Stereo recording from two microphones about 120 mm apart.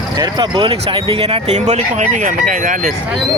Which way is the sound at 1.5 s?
75° right (ahead or behind).